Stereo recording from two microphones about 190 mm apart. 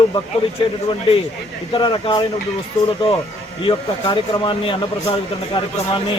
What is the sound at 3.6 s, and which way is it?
Speech, 25° left (ahead or behind).